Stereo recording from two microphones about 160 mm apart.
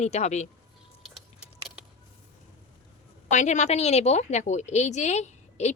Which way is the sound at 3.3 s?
50° left (ahead or behind).